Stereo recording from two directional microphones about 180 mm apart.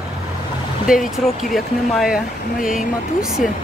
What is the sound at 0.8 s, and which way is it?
Speech, centre (ahead or behind).